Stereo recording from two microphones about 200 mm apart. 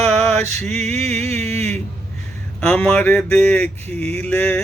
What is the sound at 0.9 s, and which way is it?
Music, 30° right (ahead or behind).